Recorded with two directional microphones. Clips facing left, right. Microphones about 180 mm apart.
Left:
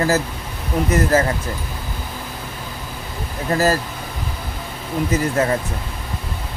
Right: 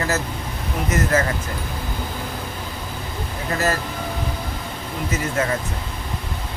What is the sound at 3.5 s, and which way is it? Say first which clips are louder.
Speech: left 5 dB; 35° left (ahead or behind).